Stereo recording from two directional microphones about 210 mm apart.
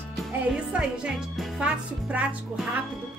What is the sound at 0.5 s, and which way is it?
Speech, 5° right (ahead or behind).